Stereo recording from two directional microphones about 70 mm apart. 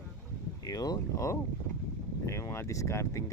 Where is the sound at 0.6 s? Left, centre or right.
Left.